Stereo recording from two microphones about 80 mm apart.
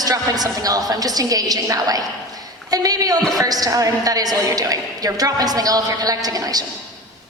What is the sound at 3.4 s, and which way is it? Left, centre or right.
A woman's voice, right.